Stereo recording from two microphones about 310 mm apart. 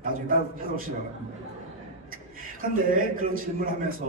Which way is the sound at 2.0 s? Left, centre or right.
Right.